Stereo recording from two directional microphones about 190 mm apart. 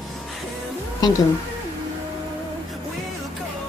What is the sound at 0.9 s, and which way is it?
Speech, 20° left (ahead or behind).